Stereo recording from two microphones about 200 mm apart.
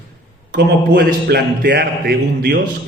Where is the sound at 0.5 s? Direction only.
55° right (ahead or behind).